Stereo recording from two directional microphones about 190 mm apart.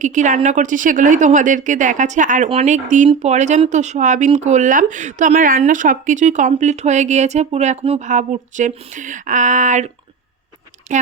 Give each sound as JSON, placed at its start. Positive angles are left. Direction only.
{"t": 0.0, "sound": "a woman's voice", "side_deg": -40}